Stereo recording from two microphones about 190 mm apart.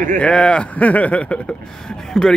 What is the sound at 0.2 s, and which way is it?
Speech, 5° left (ahead or behind).